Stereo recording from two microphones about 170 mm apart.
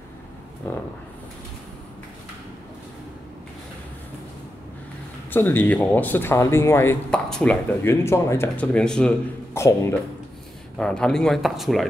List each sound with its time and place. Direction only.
5.3 s speech: 10° left (ahead or behind)
9.6 s speech: 15° left (ahead or behind)
10.8 s speech: 5° left (ahead or behind)